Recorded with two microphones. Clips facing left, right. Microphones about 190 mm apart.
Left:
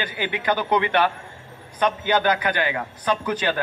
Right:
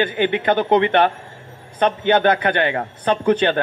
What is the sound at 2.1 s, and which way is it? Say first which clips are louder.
A man's voice: right 6 dB; 55° right (ahead or behind).